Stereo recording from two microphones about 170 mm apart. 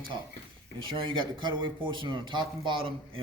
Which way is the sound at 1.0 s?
25° right (ahead or behind).